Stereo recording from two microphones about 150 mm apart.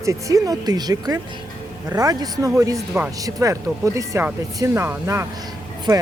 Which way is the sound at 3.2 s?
20° right (ahead or behind).